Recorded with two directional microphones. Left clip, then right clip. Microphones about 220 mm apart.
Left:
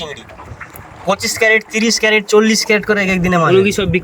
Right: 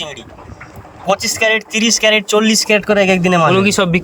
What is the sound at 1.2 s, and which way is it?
Speech, 5° right (ahead or behind).